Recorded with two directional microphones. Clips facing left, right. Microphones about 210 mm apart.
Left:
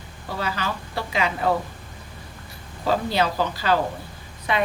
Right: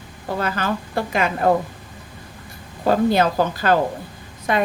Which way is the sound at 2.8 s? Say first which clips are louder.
Right 6 dB; 50° right (ahead or behind).